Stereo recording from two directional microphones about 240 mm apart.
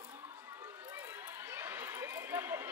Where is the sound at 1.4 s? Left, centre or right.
Centre.